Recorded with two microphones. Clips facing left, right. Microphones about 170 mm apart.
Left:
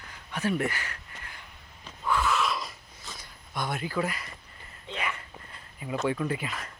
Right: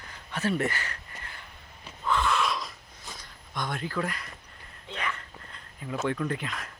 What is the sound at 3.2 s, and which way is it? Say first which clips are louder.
Speech: left 1 dB; 10° left (ahead or behind).